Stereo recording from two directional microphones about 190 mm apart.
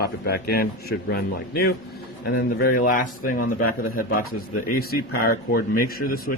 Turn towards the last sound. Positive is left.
turn(degrees=50)  # may be behind; listen again after turning